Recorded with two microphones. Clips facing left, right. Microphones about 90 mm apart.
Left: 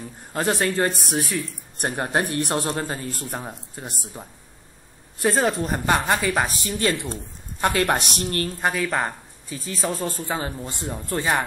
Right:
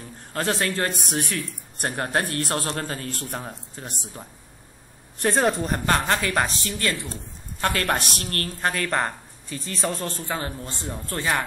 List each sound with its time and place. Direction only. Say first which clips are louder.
0.3 s speech: left 2 dB; 15° left (ahead or behind)
0.9 s speech: left 2 dB; centre (ahead or behind)
1.8 s speech: left 2 dB; 15° left (ahead or behind)
3.1 s speech: left 1 dB; 5° left (ahead or behind)
5.9 s speech: left 2 dB; 15° left (ahead or behind)
6.8 s a woman's voice: left 5 dB; 20° left (ahead or behind)
8.6 s speech: even; 5° left (ahead or behind)
10.2 s speech: left 2 dB; 15° left (ahead or behind)